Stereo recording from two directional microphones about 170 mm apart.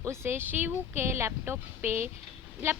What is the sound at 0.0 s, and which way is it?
A woman's voice, 15° right (ahead or behind).